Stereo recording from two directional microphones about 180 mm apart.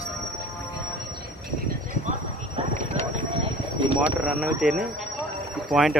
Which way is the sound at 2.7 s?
35° right (ahead or behind).